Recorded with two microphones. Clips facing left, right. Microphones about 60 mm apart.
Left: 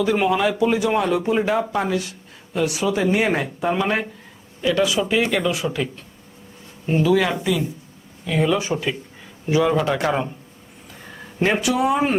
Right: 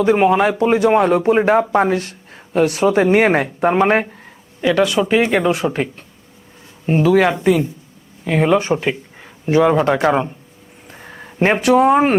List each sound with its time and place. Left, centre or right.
0.0 s speech: right
11.0 s a sound: right
11.6 s speech: right